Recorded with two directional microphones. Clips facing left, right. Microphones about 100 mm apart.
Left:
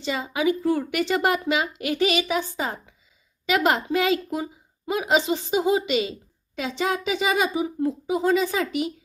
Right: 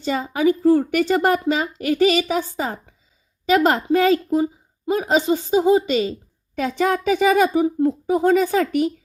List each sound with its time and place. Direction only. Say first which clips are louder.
0.0 s a woman's voice: right 5 dB; 45° right (ahead or behind)